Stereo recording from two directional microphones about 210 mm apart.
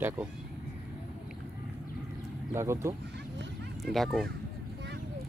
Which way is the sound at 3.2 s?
55° right (ahead or behind).